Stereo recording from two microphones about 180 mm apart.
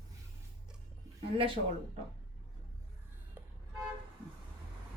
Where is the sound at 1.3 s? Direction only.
30° right (ahead or behind).